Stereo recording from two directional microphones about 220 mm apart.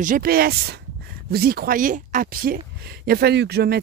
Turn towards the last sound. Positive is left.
turn(degrees=-45)  # may be behind; listen again after turning